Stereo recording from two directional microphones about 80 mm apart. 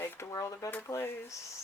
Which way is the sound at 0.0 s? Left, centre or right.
Left.